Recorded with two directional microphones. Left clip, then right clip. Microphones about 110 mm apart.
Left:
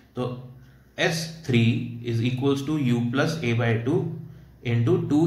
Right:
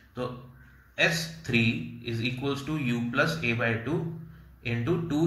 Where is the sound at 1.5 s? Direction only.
15° left (ahead or behind).